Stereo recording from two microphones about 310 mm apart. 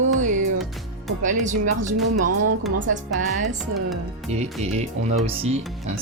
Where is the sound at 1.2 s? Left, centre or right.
Right.